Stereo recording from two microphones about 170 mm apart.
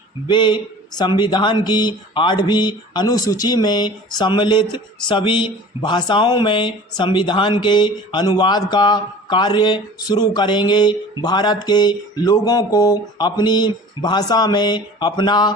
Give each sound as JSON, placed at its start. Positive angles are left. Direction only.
{"t": 0.3, "sound": "speech", "side_deg": 25}